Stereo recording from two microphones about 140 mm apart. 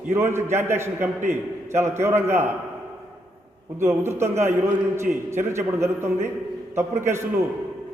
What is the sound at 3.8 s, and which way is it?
A man's voice, 20° right (ahead or behind).